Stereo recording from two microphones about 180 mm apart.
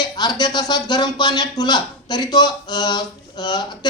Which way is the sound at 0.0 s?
25° left (ahead or behind).